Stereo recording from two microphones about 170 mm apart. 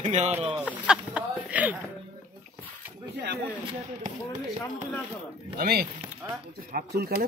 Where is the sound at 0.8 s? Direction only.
10° right (ahead or behind).